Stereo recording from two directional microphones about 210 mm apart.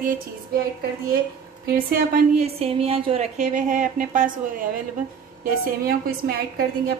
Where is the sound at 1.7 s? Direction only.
45° right (ahead or behind).